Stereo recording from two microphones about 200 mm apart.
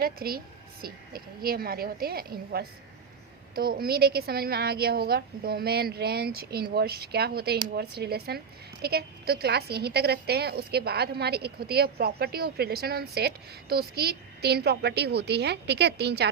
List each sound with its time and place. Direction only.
0.0 s a woman's voice: 50° right (ahead or behind)